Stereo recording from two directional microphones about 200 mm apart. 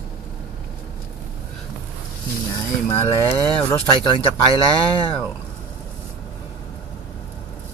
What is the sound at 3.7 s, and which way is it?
Speech, 25° left (ahead or behind).